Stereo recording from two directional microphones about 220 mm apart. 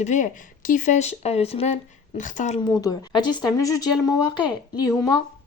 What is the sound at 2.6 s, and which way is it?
Speech, 20° left (ahead or behind).